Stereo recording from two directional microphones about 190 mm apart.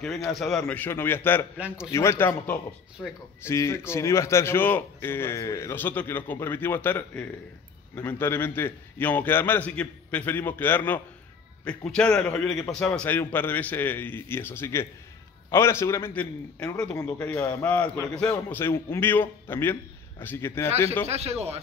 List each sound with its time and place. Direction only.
0.3 s a man's voice: centre (ahead or behind)
21.1 s a man's voice: 35° right (ahead or behind)